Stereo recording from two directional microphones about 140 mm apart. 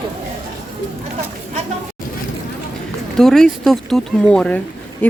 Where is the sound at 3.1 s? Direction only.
5° left (ahead or behind).